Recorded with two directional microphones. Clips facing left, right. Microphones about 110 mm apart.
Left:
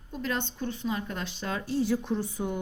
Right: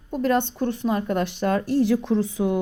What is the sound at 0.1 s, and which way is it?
A woman's voice, 55° right (ahead or behind).